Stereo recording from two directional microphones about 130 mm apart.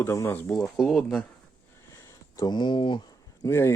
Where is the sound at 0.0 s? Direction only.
20° left (ahead or behind).